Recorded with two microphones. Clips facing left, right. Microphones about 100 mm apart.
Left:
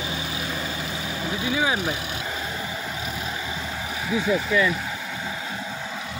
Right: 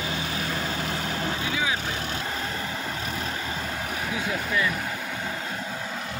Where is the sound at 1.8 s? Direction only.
10° left (ahead or behind).